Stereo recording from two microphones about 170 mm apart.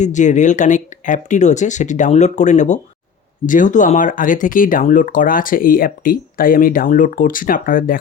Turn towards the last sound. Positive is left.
turn(degrees=55)  # may be behind; listen again after turning